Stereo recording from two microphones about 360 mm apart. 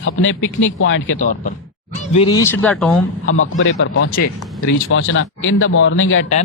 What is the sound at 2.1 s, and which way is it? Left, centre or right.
Speech, centre.